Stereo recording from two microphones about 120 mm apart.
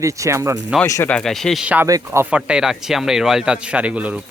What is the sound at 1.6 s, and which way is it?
Speech, 15° right (ahead or behind).